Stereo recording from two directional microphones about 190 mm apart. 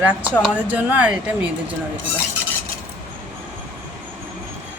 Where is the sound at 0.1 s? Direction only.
10° right (ahead or behind).